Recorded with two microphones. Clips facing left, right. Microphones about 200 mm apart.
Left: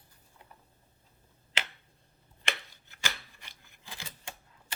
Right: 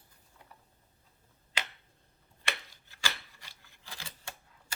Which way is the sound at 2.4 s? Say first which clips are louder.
Left 2 dB; 20° left (ahead or behind).